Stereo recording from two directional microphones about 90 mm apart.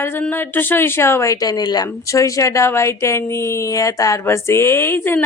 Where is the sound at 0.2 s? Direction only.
20° left (ahead or behind).